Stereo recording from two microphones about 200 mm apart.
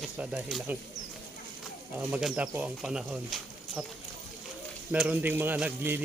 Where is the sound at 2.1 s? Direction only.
10° right (ahead or behind).